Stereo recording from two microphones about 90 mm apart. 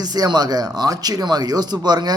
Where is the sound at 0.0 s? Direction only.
50° right (ahead or behind).